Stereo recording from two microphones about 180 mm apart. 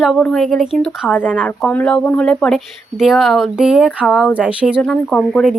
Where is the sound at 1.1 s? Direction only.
10° left (ahead or behind).